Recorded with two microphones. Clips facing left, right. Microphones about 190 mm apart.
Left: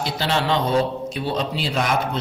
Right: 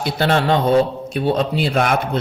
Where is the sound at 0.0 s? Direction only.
55° right (ahead or behind).